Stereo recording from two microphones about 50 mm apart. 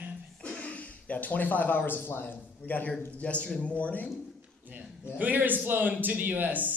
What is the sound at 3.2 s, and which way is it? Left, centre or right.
Speech, left.